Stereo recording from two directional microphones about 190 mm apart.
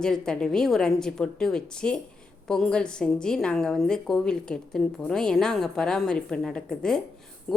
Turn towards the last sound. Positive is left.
turn(degrees=5)  # may be behind; listen again after turning